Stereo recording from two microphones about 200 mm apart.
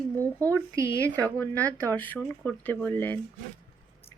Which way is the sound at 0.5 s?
15° right (ahead or behind).